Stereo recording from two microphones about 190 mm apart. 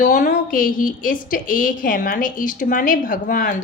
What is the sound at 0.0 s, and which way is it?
A woman's voice, 45° left (ahead or behind).